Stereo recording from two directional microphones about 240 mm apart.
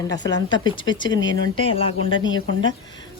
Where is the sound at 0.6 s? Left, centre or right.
Centre.